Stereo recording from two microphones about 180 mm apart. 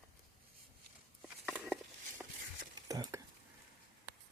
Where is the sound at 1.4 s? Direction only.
5° right (ahead or behind).